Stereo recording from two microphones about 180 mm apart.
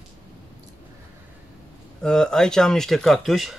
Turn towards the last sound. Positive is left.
turn(degrees=0)  # may be behind; listen again after turning